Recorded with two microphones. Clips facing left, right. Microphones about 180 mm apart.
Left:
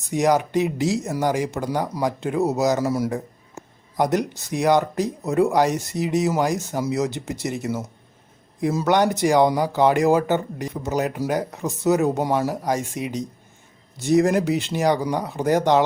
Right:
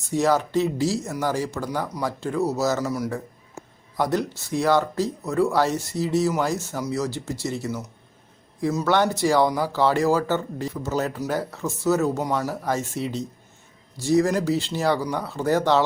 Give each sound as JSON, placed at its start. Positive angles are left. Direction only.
{"t": 0.0, "sound": "speech", "side_deg": 15}